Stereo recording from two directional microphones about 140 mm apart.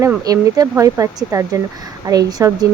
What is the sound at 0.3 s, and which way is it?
Speech, 25° right (ahead or behind).